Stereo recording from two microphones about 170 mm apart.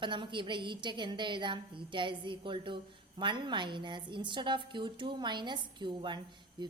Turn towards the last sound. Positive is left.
turn(degrees=-25)  # may be behind; listen again after turning